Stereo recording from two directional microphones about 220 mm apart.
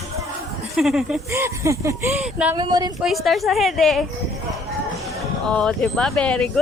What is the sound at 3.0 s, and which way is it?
A woman's voice, centre (ahead or behind).